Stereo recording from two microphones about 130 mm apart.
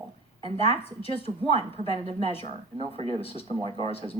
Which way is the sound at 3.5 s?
40° right (ahead or behind).